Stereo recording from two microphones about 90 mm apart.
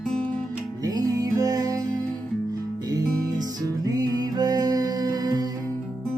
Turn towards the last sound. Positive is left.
turn(degrees=-45)  # may be behind; listen again after turning